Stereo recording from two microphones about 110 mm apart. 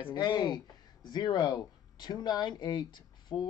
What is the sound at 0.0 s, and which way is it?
Speech, 40° left (ahead or behind).